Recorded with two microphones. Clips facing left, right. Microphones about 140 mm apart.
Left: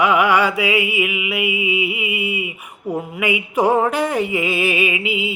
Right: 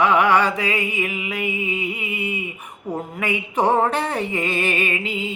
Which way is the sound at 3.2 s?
10° left (ahead or behind).